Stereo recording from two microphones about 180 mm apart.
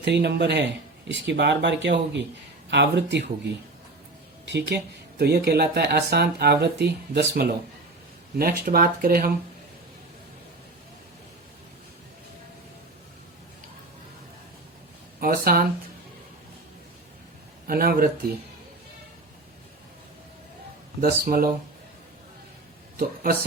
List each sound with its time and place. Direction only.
0.0 s speech: 70° right (ahead or behind)
4.4 s speech: 70° right (ahead or behind); by 9.3 s 55° right (ahead or behind)
15.2 s speech: 55° right (ahead or behind)
17.7 s speech: 55° right (ahead or behind)
21.0 s speech: 55° right (ahead or behind)
23.0 s speech: 55° right (ahead or behind)